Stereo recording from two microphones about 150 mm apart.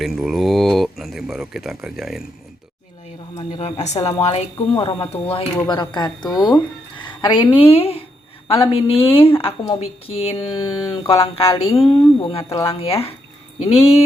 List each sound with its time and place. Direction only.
0.0 s speech: centre (ahead or behind)
3.5 s speech: 40° left (ahead or behind)
5.6 s speech: 30° left (ahead or behind)